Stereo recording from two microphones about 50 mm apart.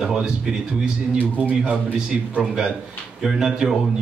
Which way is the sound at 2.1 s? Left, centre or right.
Centre.